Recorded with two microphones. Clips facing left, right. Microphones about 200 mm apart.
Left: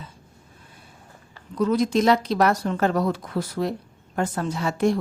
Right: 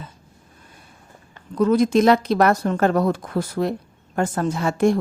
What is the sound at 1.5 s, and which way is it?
Speech, 50° right (ahead or behind).